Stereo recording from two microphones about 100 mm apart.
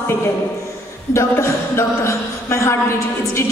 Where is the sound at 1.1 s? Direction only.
30° left (ahead or behind).